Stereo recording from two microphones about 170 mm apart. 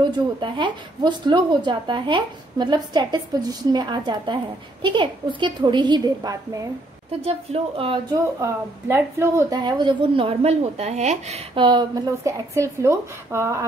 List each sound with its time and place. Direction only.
0.0 s speech: 25° right (ahead or behind)
7.2 s speech: 35° right (ahead or behind)
8.4 s speech: 15° right (ahead or behind)